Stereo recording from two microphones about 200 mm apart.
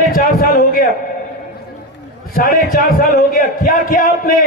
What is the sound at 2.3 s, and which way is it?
A man's voice, 45° left (ahead or behind).